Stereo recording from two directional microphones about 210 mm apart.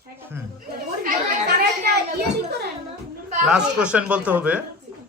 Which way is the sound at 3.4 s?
5° right (ahead or behind).